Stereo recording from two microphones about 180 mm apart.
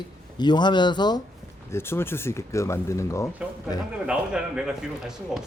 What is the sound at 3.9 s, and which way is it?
Speech, 5° right (ahead or behind).